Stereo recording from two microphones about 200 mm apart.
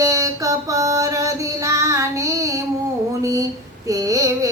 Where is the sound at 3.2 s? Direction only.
15° right (ahead or behind).